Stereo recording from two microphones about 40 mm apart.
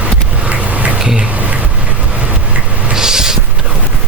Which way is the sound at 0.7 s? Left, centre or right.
Right.